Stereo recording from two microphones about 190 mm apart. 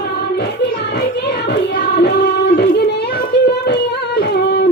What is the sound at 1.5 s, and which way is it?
Music, 60° left (ahead or behind).